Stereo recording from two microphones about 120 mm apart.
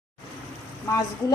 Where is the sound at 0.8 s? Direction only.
30° left (ahead or behind).